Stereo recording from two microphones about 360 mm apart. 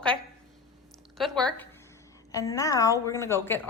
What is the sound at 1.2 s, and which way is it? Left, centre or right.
A woman's voice, centre.